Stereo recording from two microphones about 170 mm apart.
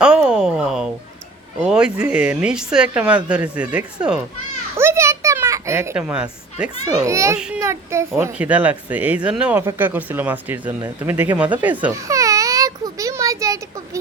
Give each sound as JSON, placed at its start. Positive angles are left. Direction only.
{"t": 0.0, "sound": "a sound", "side_deg": -5}
{"t": 1.6, "sound": "a child's voice", "side_deg": -5}
{"t": 7.0, "sound": "speech", "side_deg": -15}
{"t": 7.3, "sound": "speech", "side_deg": -5}
{"t": 7.6, "sound": "speech", "side_deg": -15}
{"t": 11.5, "sound": "a sound", "side_deg": -10}